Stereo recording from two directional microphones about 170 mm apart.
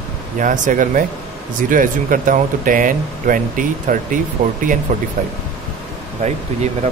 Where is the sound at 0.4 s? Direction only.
50° right (ahead or behind).